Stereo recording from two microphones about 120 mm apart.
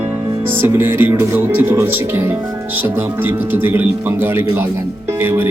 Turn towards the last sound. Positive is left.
turn(degrees=-20)  # may be behind; listen again after turning